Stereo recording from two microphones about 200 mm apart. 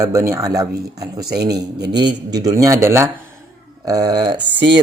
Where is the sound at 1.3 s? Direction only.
55° right (ahead or behind).